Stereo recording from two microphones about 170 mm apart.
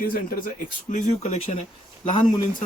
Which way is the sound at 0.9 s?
40° left (ahead or behind).